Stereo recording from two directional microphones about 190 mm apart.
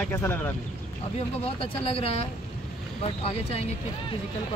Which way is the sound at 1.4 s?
30° left (ahead or behind).